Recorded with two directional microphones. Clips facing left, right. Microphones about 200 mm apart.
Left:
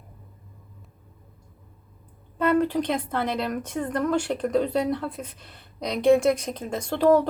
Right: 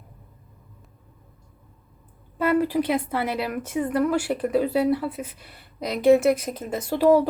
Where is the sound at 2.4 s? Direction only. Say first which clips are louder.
Right 1 dB; 5° right (ahead or behind).